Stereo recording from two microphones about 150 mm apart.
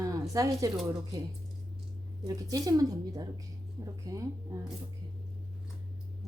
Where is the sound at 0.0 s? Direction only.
20° right (ahead or behind).